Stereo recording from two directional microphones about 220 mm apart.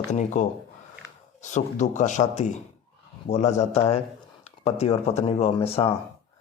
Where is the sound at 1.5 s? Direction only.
35° left (ahead or behind).